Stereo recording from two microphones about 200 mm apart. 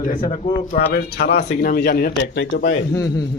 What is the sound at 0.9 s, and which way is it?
Speech, 50° left (ahead or behind).